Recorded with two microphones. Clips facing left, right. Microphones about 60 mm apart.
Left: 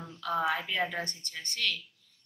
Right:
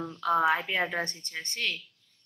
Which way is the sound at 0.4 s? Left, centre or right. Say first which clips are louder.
Right 2 dB; right.